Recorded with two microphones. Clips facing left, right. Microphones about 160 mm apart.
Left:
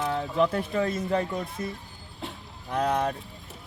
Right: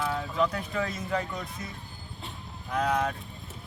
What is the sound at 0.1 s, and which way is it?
Speech, 30° left (ahead or behind).